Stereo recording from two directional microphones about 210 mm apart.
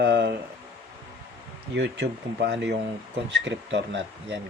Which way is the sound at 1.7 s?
55° right (ahead or behind).